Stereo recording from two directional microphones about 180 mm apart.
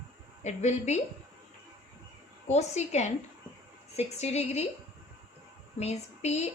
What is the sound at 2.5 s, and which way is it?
Speech, 40° left (ahead or behind).